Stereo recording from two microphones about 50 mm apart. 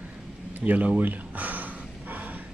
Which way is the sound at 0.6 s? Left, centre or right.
Right.